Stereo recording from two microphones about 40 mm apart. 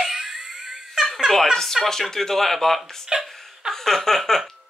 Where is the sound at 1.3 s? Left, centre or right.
Centre.